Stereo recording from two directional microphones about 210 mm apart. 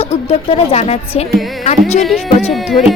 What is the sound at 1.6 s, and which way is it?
Music, 30° left (ahead or behind).